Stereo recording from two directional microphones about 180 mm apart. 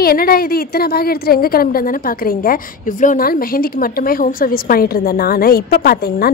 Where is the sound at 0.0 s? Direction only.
55° left (ahead or behind).